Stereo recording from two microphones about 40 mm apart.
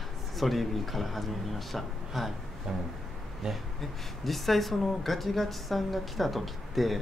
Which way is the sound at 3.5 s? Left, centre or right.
Centre.